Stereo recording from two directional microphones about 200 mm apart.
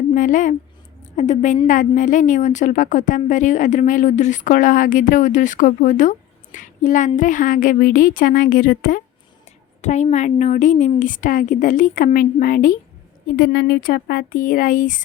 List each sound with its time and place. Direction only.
0.1 s a woman's voice: 40° left (ahead or behind)